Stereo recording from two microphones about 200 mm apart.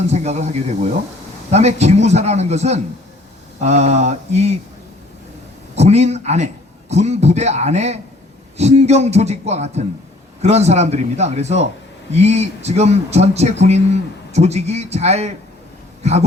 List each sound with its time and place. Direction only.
0.1 s a man's voice: 35° right (ahead or behind)
5.7 s a man's voice: 35° right (ahead or behind)